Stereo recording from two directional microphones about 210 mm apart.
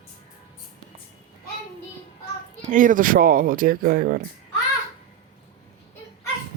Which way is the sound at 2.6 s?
40° right (ahead or behind).